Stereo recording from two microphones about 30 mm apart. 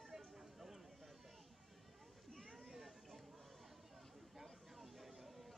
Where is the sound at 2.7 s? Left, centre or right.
Centre.